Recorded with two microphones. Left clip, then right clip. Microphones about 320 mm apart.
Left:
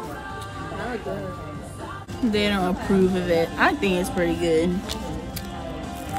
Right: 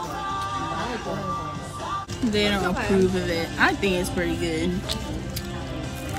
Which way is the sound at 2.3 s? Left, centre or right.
Centre.